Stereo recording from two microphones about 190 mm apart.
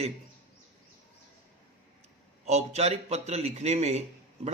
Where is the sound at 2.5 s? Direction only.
35° right (ahead or behind).